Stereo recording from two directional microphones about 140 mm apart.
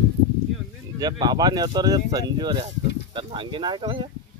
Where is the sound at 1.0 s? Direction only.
30° right (ahead or behind).